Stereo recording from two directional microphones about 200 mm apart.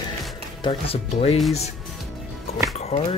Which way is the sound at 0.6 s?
25° left (ahead or behind).